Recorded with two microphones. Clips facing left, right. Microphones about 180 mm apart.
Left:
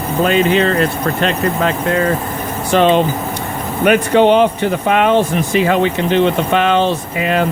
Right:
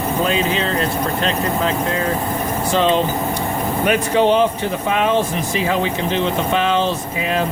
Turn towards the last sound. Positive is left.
turn(degrees=65)  # may be behind; listen again after turning